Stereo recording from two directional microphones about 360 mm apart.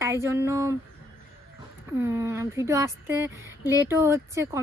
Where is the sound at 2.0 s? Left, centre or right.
Centre.